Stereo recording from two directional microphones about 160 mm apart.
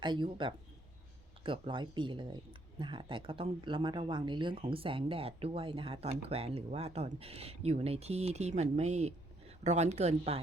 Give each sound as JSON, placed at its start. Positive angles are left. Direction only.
{"t": 0.0, "sound": "speech", "side_deg": -30}